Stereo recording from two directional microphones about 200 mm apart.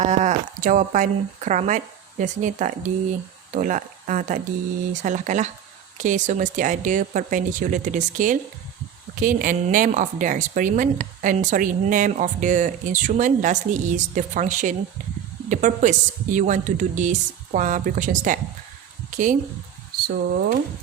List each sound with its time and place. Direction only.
0.0 s a woman's voice: 35° right (ahead or behind)